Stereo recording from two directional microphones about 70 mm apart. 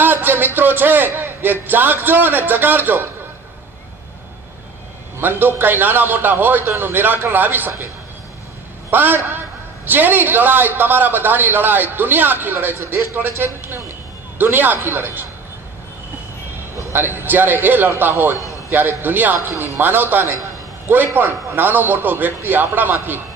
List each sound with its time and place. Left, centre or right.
0.0 s a man's voice: right
5.2 s a man's voice: right
8.9 s a man's voice: right
16.9 s a man's voice: right